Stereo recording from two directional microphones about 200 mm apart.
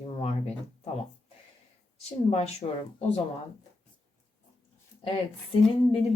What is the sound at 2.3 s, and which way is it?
Speech, 30° left (ahead or behind).